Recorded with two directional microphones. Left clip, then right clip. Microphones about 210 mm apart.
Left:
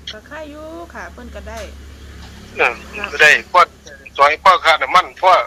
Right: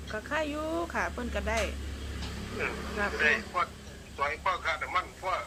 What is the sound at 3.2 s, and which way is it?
A man's voice, 50° left (ahead or behind).